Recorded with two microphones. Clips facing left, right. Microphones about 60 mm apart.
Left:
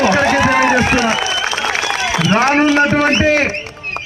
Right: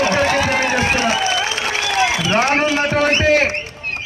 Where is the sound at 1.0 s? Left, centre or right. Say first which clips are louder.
Left 2 dB; left.